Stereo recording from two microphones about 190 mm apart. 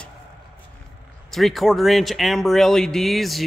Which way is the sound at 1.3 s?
Centre (ahead or behind).